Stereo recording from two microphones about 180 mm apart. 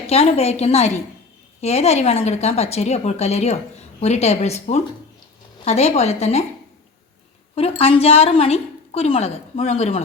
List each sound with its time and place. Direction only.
0.1 s a woman's voice: 35° left (ahead or behind)
7.5 s a woman's voice: 35° left (ahead or behind)